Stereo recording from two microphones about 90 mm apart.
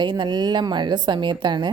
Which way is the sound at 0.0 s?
55° right (ahead or behind).